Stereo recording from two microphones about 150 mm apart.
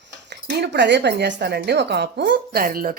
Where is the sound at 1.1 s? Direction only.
90° right.